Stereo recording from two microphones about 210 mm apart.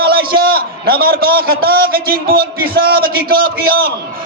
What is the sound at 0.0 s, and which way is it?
A man's voice, 45° right (ahead or behind).